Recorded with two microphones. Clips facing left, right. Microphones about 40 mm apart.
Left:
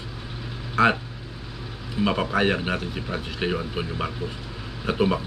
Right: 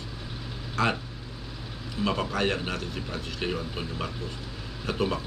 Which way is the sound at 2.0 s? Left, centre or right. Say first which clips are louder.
Left 5 dB; centre.